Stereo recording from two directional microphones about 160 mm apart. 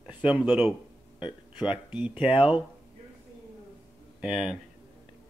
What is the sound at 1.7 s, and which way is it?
Speech, 10° right (ahead or behind).